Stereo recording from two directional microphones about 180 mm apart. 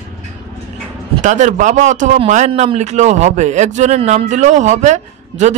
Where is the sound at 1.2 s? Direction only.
45° right (ahead or behind).